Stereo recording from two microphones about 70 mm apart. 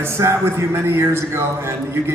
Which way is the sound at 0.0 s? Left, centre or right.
Right.